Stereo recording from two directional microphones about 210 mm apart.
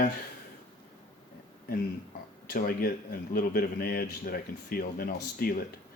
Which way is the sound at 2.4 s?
45° left (ahead or behind).